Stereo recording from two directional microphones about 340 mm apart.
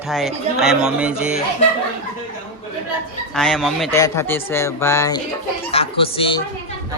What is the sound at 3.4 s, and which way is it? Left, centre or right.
Speech, centre.